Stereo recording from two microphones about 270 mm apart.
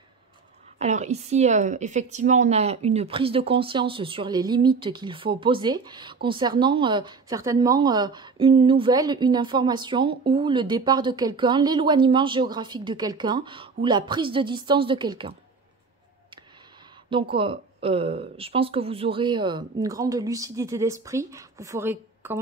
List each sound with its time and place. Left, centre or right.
0.7 s a woman's voice: right
17.1 s speech: centre